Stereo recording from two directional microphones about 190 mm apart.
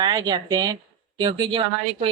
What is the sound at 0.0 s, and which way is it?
Speech, 20° right (ahead or behind).